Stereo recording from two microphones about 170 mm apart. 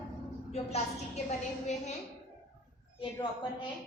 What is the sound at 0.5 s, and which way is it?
Speech, 40° left (ahead or behind).